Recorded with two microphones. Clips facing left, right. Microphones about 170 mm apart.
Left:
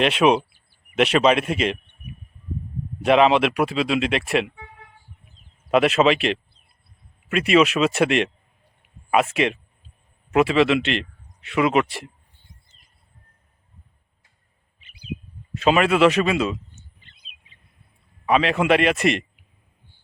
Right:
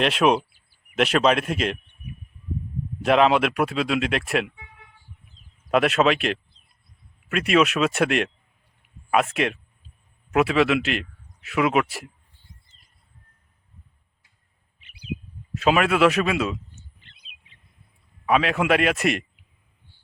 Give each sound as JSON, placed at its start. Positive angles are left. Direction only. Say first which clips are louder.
{"t": 0.0, "sound": "speech", "louder": "left 2 dB", "side_deg": 0}
{"t": 3.0, "sound": "speech", "louder": "left 2 dB", "side_deg": 0}
{"t": 4.4, "sound": "toot", "louder": "left 3 dB", "side_deg": 50}
{"t": 5.6, "sound": "speech", "louder": "left 2 dB", "side_deg": 0}
{"t": 14.8, "sound": "bird", "louder": "right 1 dB", "side_deg": -65}
{"t": 15.5, "sound": "speech", "louder": "left 2 dB", "side_deg": 0}
{"t": 17.0, "sound": "bird", "louder": "left 1 dB", "side_deg": -70}
{"t": 18.3, "sound": "speech", "louder": "left 2 dB", "side_deg": 0}